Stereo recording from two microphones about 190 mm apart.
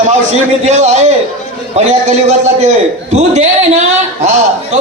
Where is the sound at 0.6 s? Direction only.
35° right (ahead or behind).